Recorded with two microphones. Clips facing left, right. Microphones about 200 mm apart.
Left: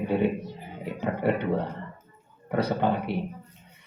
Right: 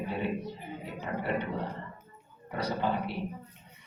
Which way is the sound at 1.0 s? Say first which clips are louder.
Left 7 dB; 55° left (ahead or behind).